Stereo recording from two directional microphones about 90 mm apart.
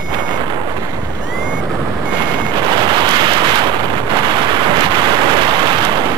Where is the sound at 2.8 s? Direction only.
55° right (ahead or behind).